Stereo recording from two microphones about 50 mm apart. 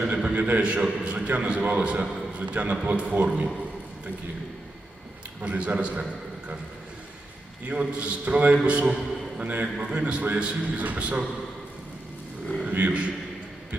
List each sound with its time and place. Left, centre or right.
0.1 s a man's voice: centre
0.3 s a man's voice: right
0.6 s a man's voice: right
5.4 s a man's voice: right
7.7 s a man's voice: right
9.7 s a man's voice: centre
12.7 s a man's voice: right